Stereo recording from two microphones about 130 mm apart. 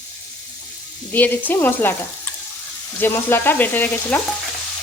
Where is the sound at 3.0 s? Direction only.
15° left (ahead or behind).